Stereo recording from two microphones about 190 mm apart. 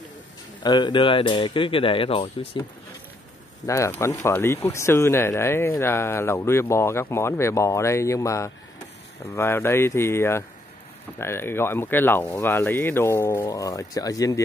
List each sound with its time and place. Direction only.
0.6 s speech: 25° left (ahead or behind)
3.6 s speech: 15° left (ahead or behind)